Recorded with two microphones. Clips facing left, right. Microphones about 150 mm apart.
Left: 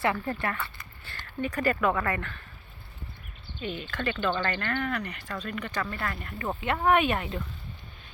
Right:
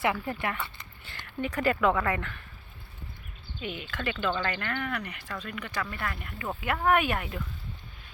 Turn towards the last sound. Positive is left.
turn(degrees=-5)  # may be behind; listen again after turning